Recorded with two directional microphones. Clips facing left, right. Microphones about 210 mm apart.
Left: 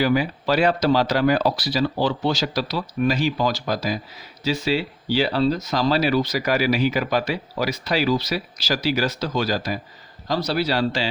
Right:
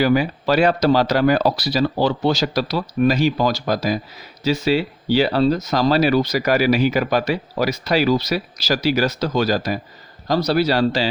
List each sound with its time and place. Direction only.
0.0 s speech: 45° right (ahead or behind)